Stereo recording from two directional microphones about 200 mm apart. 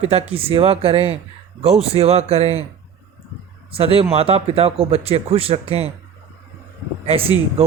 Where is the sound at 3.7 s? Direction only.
30° right (ahead or behind).